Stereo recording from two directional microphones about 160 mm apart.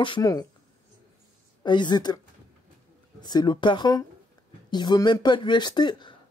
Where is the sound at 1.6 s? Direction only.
30° left (ahead or behind).